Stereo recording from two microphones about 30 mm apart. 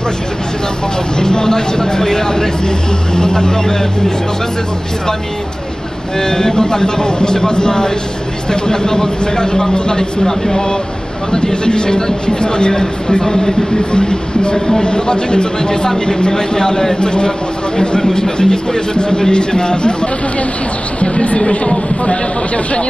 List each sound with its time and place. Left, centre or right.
1.2 s a man's voice: left
6.1 s a man's voice: centre
13.2 s speech: centre
13.9 s a man's voice: left
21.0 s speech: left